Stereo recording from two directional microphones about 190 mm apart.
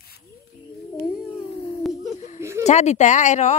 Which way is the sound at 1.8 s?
Centre (ahead or behind).